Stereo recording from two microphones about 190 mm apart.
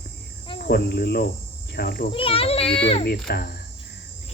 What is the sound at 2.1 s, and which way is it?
Speech, 30° left (ahead or behind).